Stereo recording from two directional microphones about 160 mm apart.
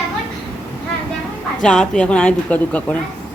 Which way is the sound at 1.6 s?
5° left (ahead or behind).